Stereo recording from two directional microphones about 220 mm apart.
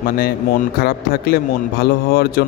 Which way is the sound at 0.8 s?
45° left (ahead or behind).